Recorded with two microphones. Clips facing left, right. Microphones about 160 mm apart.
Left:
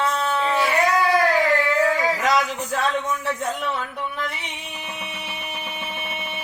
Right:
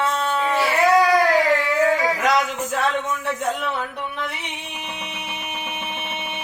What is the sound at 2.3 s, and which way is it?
Speech, 20° right (ahead or behind).